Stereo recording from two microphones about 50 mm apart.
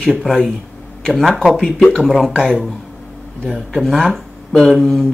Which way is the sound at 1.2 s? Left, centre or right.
Centre.